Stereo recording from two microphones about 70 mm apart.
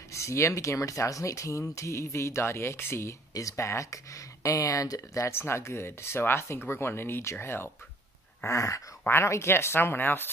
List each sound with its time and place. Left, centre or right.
0.1 s speech: left
8.5 s speech: left
9.0 s speech: left